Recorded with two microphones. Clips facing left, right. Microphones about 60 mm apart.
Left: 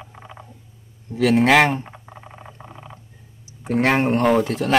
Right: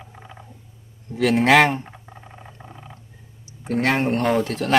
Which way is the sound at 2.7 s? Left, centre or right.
Centre.